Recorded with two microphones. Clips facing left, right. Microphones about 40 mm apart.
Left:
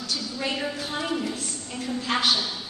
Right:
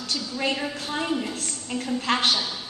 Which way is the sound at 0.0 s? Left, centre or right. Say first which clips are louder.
Right 2 dB; right.